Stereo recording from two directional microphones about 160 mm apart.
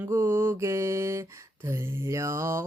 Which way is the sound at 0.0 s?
15° right (ahead or behind).